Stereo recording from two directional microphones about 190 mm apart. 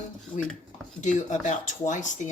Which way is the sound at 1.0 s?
40° left (ahead or behind).